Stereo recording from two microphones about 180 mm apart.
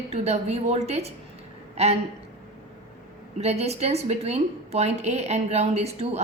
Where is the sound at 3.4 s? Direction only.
35° right (ahead or behind).